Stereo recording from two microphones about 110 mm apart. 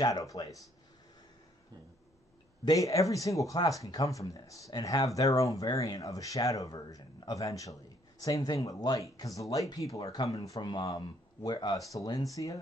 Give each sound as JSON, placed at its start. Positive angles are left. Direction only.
{"t": 0.0, "sound": "speech", "side_deg": 35}
{"t": 2.6, "sound": "speech", "side_deg": 30}
{"t": 10.6, "sound": "speech", "side_deg": 45}